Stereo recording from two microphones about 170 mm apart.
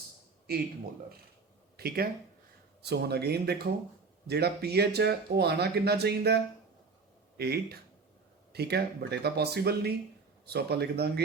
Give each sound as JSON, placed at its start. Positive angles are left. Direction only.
{"t": 1.7, "sound": "speech", "side_deg": -65}